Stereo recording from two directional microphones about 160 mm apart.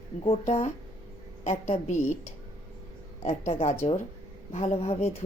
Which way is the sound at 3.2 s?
40° left (ahead or behind).